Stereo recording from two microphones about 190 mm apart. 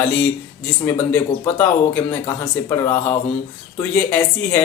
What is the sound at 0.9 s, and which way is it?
Speech, 10° left (ahead or behind).